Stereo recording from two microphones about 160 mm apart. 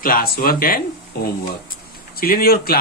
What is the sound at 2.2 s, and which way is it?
Speech, 65° left (ahead or behind).